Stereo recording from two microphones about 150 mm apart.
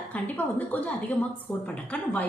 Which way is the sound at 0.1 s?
10° left (ahead or behind).